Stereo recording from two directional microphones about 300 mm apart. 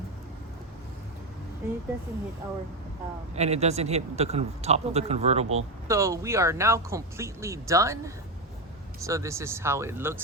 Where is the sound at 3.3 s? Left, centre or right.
Right.